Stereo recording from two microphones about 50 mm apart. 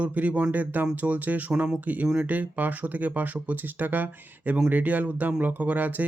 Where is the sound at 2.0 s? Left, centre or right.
Right.